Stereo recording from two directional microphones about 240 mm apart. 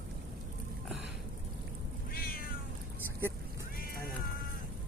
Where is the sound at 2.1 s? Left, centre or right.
Left.